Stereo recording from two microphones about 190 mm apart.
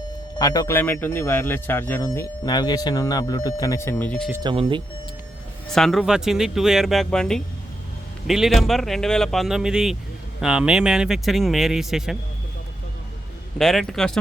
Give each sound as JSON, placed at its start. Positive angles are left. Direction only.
{"t": 0.3, "sound": "speech", "side_deg": 20}
{"t": 4.4, "sound": "speech", "side_deg": -25}
{"t": 5.7, "sound": "speech", "side_deg": 0}
{"t": 13.6, "sound": "speech", "side_deg": 0}